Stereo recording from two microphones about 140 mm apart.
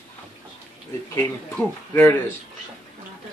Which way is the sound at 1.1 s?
15° left (ahead or behind).